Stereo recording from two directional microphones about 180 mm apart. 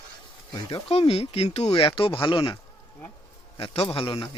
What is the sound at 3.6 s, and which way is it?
Speech, 30° left (ahead or behind).